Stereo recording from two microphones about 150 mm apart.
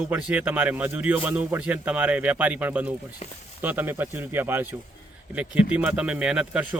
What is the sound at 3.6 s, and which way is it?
Speech, 10° right (ahead or behind).